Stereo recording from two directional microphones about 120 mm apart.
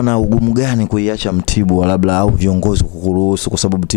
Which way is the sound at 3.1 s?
25° left (ahead or behind).